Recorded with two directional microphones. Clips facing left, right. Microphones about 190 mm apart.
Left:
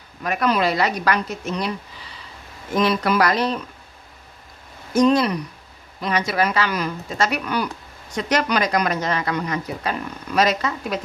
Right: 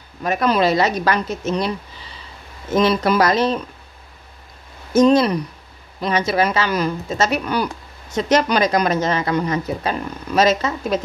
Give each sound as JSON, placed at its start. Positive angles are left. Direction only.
{"t": 0.2, "sound": "speech", "side_deg": -25}
{"t": 2.7, "sound": "speech", "side_deg": -25}
{"t": 4.9, "sound": "speech", "side_deg": -25}